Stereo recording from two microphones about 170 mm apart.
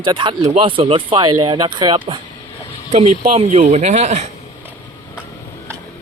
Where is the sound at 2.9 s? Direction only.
40° right (ahead or behind).